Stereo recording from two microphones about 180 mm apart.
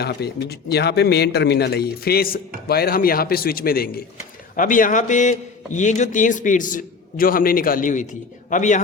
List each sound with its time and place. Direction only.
0.0 s a man's voice: 65° left (ahead or behind); by 8.8 s 45° left (ahead or behind)